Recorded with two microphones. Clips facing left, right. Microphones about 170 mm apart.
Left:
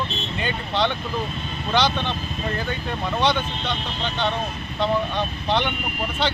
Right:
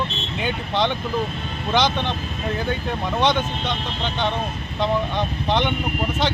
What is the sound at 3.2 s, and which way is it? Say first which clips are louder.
Speech: right 2 dB; 15° right (ahead or behind).